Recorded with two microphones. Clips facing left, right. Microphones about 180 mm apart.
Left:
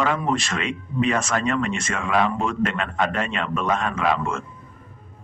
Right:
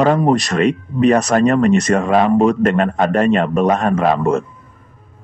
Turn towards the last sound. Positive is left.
turn(degrees=-40)  # may be behind; listen again after turning